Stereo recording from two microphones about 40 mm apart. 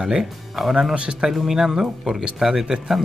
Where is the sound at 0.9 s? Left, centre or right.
Right.